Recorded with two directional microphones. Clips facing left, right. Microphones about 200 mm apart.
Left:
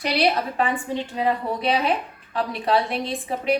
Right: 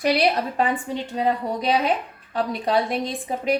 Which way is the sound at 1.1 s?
40° right (ahead or behind).